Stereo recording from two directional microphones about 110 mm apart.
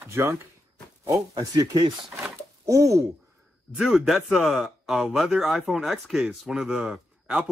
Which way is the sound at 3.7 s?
Centre (ahead or behind).